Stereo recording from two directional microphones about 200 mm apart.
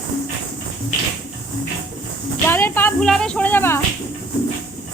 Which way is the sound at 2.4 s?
10° left (ahead or behind).